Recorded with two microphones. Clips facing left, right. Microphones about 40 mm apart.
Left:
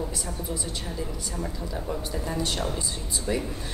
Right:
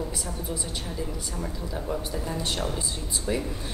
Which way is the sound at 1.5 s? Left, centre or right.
Centre.